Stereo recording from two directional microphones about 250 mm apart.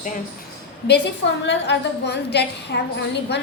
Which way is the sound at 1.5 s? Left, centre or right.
Left.